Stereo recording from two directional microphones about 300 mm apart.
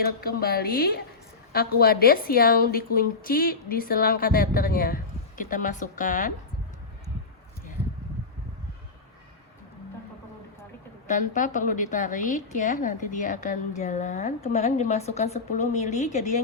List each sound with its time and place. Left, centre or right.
0.0 s a woman's voice: left
11.1 s a woman's voice: left